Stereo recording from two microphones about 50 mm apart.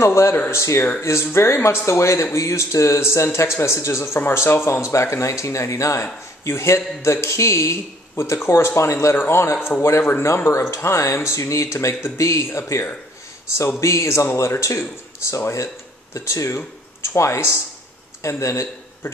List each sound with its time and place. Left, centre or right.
0.0 s speech: left
2.3 s speech: left
6.4 s speech: left
8.2 s speech: left
9.1 s speech: left
12.2 s speech: left
13.7 s speech: left
18.4 s speech: left